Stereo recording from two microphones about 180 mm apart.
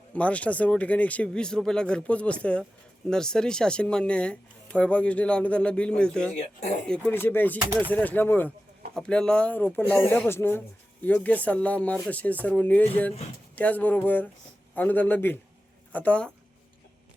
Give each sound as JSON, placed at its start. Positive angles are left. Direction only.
{"t": 0.1, "sound": "speech", "side_deg": 5}
{"t": 6.4, "sound": "speech", "side_deg": 40}
{"t": 6.8, "sound": "speech", "side_deg": 10}